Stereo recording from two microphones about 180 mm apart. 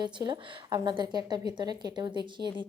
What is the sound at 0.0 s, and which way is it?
A woman's voice, 25° right (ahead or behind).